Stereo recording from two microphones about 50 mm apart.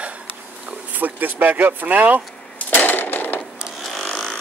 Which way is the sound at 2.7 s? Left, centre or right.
Left.